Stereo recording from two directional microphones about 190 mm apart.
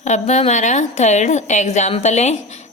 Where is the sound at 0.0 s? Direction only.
35° left (ahead or behind).